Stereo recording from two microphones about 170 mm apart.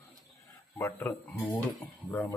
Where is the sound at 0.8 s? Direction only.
15° left (ahead or behind).